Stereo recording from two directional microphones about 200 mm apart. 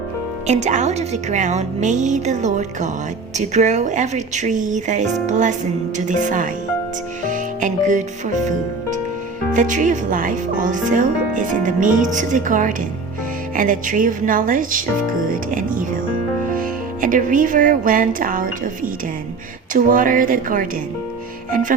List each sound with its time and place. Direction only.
0.4 s speech: 35° right (ahead or behind)
7.3 s music: 40° right (ahead or behind)
9.5 s speech: 40° right (ahead or behind)